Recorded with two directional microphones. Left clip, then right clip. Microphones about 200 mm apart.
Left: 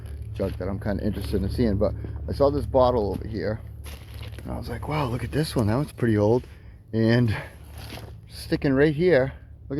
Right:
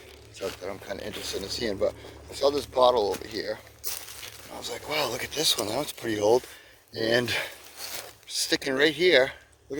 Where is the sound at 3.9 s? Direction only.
30° right (ahead or behind).